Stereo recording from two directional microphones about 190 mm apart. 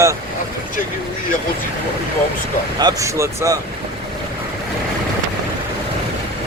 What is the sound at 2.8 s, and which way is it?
Speech, 15° right (ahead or behind).